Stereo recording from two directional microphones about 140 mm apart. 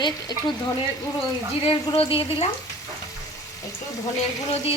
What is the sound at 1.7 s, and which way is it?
Speech, 40° left (ahead or behind).